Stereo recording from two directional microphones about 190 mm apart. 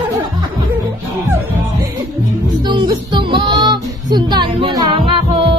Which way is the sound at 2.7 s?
25° right (ahead or behind).